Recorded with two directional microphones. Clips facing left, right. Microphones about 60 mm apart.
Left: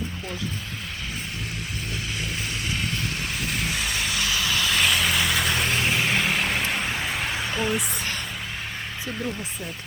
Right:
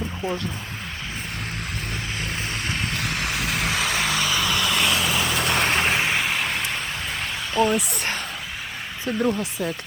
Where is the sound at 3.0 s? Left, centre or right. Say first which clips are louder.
Right 3 dB; right.